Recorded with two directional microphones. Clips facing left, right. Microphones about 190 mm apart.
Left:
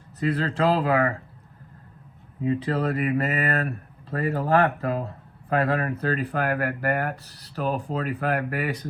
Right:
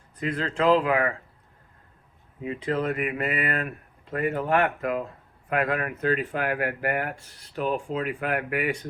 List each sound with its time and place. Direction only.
0.2 s speech: 35° left (ahead or behind)
2.4 s speech: 35° left (ahead or behind)